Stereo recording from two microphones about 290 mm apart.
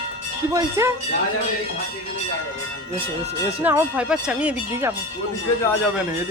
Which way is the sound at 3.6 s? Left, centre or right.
Centre.